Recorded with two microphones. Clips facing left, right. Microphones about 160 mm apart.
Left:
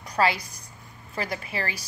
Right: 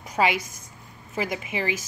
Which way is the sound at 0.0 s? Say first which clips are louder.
Right 1 dB; 20° right (ahead or behind).